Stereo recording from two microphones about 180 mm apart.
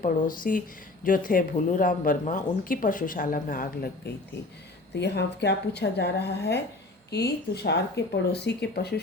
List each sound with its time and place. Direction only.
0.0 s speech: 50° left (ahead or behind)
4.9 s speech: 70° left (ahead or behind)